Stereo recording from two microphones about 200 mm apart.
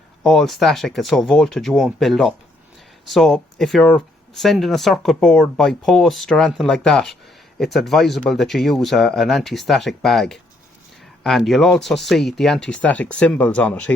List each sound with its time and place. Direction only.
0.3 s speech: centre (ahead or behind)